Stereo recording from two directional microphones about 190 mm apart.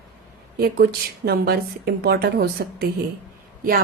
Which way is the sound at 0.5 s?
55° right (ahead or behind).